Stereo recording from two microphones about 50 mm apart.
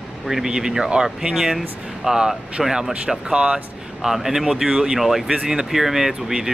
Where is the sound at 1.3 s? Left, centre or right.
Centre.